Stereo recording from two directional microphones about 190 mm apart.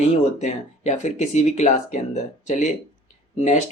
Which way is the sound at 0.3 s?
40° left (ahead or behind).